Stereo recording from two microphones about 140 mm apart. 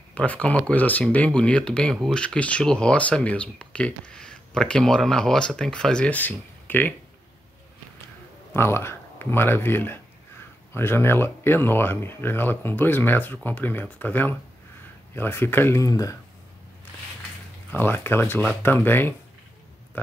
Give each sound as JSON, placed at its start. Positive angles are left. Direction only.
{"t": 0.1, "sound": "speech", "side_deg": 10}
{"t": 8.5, "sound": "speech", "side_deg": 15}
{"t": 17.7, "sound": "speech", "side_deg": 15}